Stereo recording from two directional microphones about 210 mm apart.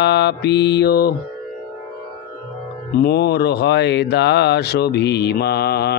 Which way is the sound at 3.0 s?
50° left (ahead or behind).